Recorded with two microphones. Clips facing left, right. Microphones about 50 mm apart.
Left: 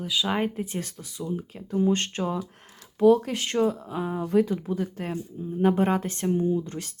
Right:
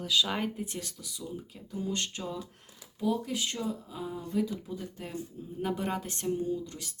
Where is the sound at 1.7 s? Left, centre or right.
Left.